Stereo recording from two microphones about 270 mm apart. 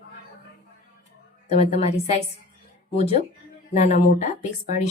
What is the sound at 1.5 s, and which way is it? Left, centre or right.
Speech, left.